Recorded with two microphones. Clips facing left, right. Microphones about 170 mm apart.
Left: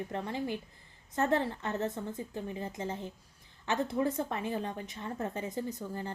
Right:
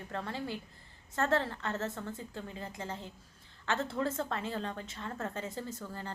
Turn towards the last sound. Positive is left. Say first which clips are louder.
# left 4 dB
turn(degrees=20)  # may be behind; listen again after turning